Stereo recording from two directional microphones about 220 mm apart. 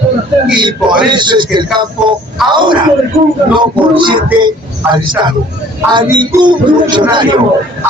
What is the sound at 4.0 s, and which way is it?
Speech, 20° right (ahead or behind).